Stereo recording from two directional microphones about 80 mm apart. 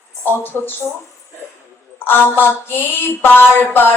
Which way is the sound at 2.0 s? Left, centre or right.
Left.